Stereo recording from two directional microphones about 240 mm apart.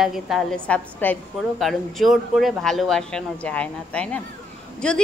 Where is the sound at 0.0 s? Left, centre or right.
Centre.